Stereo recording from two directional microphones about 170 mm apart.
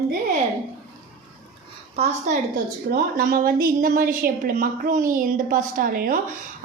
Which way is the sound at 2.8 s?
60° right (ahead or behind).